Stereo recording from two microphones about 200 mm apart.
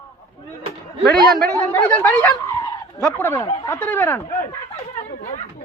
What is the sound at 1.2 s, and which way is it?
Speech, 50° right (ahead or behind).